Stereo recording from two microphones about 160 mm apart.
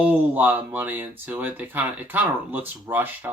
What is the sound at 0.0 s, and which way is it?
Speech, 10° right (ahead or behind).